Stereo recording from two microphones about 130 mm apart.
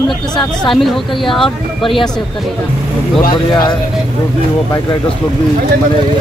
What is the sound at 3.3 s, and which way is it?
Speech, 35° left (ahead or behind).